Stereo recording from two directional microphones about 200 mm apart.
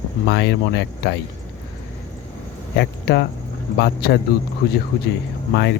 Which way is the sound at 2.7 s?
60° left (ahead or behind).